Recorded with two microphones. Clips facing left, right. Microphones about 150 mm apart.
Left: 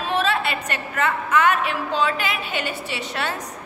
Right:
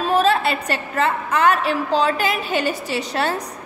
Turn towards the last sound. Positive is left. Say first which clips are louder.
# right 5 dB
turn(degrees=-35)  # may be behind; listen again after turning